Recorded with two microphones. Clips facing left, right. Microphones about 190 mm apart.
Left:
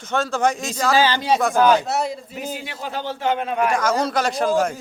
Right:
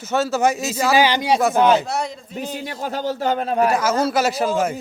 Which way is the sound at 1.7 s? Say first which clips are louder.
Even; 5° left (ahead or behind).